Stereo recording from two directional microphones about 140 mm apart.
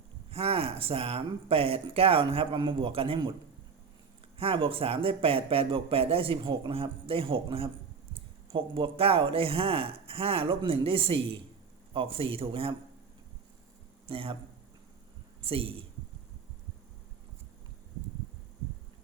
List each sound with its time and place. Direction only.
0.3 s speech: 45° right (ahead or behind)
4.4 s speech: 40° right (ahead or behind)
14.1 s speech: 40° right (ahead or behind)
15.4 s speech: 40° right (ahead or behind)